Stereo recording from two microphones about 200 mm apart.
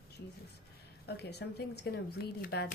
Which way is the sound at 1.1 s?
55° left (ahead or behind).